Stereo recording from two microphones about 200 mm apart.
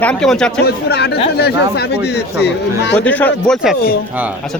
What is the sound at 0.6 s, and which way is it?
Speech, 55° left (ahead or behind).